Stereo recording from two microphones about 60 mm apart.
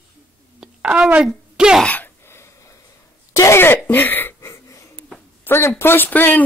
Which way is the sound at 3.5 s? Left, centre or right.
Left.